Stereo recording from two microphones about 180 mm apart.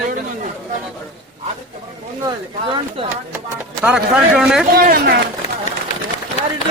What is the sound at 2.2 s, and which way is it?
Speech, 30° right (ahead or behind).